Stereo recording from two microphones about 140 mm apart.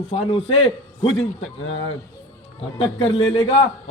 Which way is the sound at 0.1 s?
40° left (ahead or behind).